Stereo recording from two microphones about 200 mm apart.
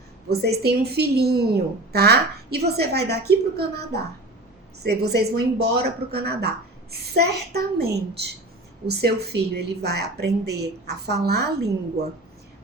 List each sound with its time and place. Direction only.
0.3 s a woman's voice: 50° right (ahead or behind)